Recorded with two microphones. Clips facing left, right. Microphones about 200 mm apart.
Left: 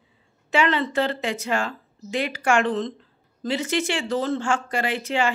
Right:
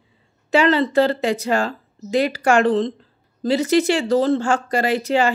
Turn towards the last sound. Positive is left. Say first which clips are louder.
# right 6 dB
turn(degrees=-40)  # may be behind; listen again after turning